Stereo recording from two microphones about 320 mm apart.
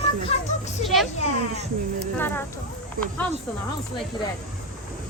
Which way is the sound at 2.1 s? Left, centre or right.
Centre.